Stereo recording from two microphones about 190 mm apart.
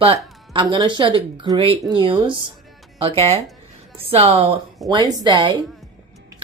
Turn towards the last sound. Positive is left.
turn(degrees=-25)  # may be behind; listen again after turning